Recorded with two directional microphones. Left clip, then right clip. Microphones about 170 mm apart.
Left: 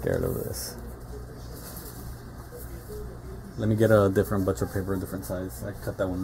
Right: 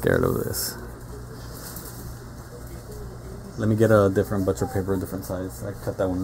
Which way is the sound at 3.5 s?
5° right (ahead or behind).